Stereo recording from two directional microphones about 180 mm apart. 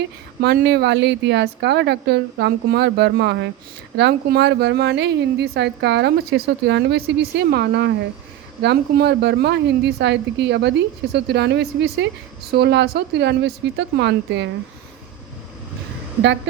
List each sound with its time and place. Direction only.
0.4 s a woman's voice: 70° right (ahead or behind)